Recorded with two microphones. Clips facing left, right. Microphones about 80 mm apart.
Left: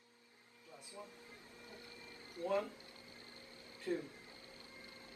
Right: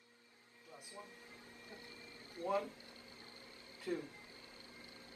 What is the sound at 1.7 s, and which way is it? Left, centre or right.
Printer, right.